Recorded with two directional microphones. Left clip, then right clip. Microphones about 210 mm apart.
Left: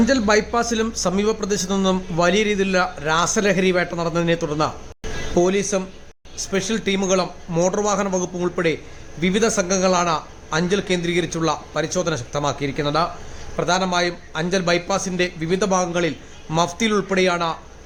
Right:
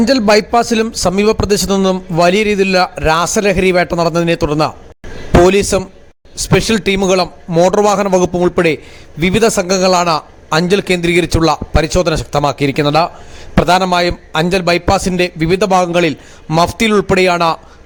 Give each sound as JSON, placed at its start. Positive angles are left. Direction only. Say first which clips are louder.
{"t": 0.0, "sound": "a man's voice", "louder": "right 7 dB", "side_deg": -35}